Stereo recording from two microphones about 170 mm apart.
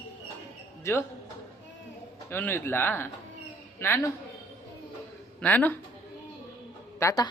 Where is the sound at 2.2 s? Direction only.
15° left (ahead or behind).